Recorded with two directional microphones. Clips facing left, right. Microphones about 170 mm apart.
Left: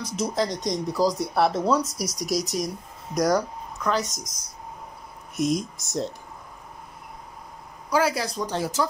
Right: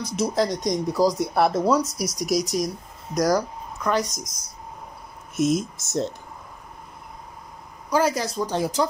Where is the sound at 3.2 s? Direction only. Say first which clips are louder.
Right 1 dB; 5° right (ahead or behind).